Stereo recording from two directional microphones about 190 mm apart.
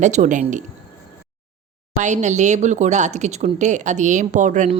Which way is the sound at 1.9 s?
40° right (ahead or behind).